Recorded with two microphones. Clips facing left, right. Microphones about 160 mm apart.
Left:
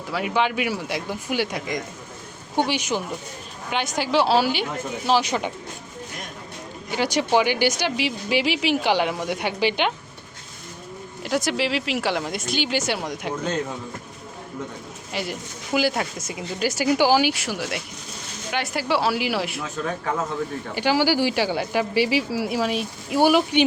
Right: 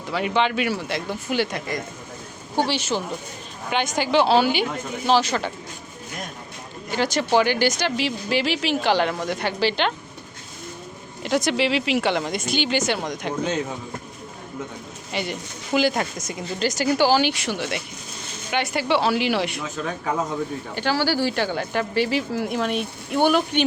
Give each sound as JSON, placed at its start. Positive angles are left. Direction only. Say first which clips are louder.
{"t": 0.1, "sound": "speech", "louder": "right 1 dB", "side_deg": 5}
{"t": 3.7, "sound": "speech", "louder": "right 2 dB", "side_deg": 0}
{"t": 6.9, "sound": "speech", "louder": "even", "side_deg": 10}
{"t": 11.2, "sound": "speech", "louder": "right 2 dB", "side_deg": 5}
{"t": 15.1, "sound": "speech", "louder": "right 1 dB", "side_deg": 5}
{"t": 20.7, "sound": "speech", "louder": "left 2 dB", "side_deg": 10}